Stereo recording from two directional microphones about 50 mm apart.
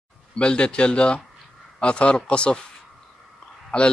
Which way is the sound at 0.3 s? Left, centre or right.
Left.